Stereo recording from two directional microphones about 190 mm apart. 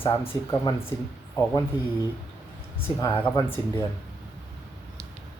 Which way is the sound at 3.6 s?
20° left (ahead or behind).